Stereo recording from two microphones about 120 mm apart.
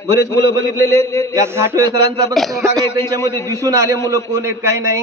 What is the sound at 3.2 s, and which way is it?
Speech, 25° left (ahead or behind).